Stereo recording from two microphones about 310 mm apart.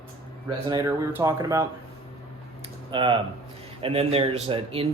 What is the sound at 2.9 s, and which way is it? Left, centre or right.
Speech, centre.